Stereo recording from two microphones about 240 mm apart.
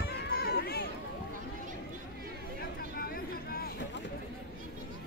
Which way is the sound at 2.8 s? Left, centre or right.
Left.